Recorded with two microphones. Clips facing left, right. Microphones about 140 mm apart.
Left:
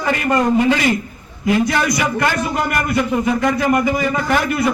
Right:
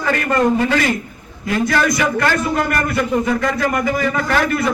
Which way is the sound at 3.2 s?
20° left (ahead or behind).